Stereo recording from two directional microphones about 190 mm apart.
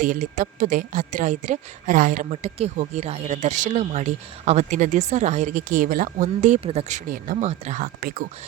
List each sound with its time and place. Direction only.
0.0 s speech: 45° right (ahead or behind)